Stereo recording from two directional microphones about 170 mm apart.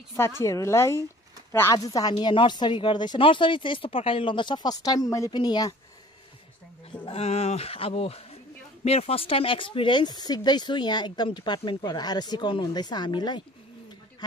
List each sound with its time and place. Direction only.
0.4 s a woman's voice: 15° left (ahead or behind)
7.1 s a sound: 35° left (ahead or behind)
8.8 s speech: 35° left (ahead or behind)